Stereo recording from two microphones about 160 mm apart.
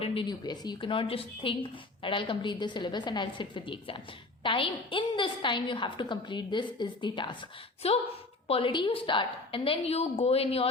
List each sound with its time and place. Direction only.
0.0 s a woman's voice: 35° left (ahead or behind)
7.8 s a woman's voice: 40° left (ahead or behind)